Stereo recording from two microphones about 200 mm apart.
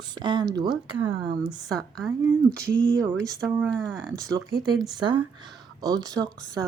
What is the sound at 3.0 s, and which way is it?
Speech, 5° left (ahead or behind).